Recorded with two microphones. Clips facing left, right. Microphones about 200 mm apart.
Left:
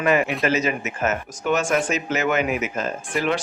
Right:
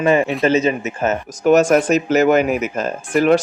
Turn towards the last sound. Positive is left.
turn(degrees=-45)  # may be behind; listen again after turning